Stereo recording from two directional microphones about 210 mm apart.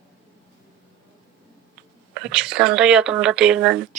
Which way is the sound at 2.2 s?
5° right (ahead or behind).